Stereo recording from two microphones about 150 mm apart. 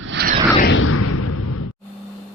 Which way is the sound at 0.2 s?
90° right.